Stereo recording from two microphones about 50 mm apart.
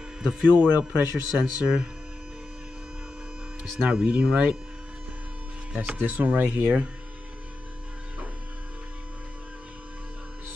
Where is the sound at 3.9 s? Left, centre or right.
Right.